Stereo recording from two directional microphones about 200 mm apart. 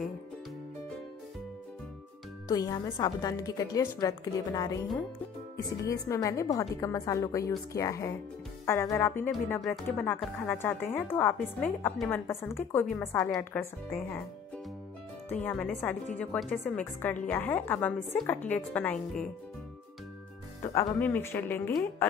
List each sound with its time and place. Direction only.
2.4 s a woman's voice: 20° left (ahead or behind)
5.9 s a woman's voice: 15° left (ahead or behind)
15.2 s a woman's voice: 10° left (ahead or behind)
20.6 s a woman's voice: 10° left (ahead or behind)